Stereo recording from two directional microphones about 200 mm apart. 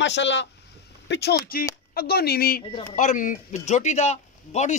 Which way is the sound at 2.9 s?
40° left (ahead or behind).